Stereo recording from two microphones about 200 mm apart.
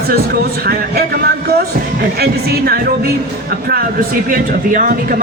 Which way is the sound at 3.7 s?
45° right (ahead or behind).